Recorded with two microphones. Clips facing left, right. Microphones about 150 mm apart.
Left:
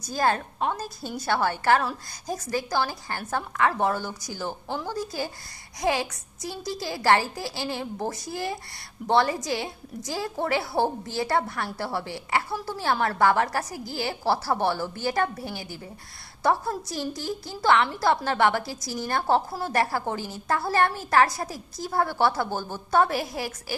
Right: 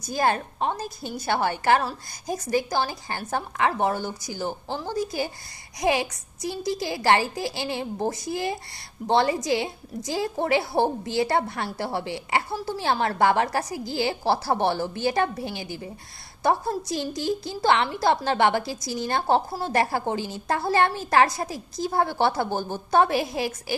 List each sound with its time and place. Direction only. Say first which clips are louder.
0.1 s a woman's voice: right 1 dB; 15° right (ahead or behind)